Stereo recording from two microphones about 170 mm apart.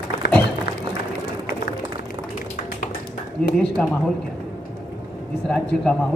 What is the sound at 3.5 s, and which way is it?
Speech, centre (ahead or behind).